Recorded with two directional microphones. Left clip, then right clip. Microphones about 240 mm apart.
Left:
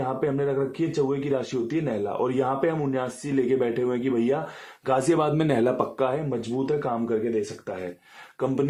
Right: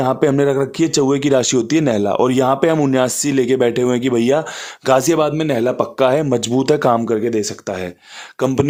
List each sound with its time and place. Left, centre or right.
0.0 s speech: right
6.1 s speech: right